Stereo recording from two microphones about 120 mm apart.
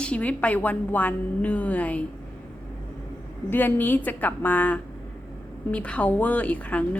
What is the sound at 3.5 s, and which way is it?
A woman's voice, 15° left (ahead or behind).